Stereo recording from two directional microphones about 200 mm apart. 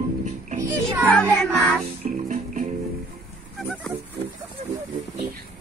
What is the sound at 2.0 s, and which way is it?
Music, 35° right (ahead or behind).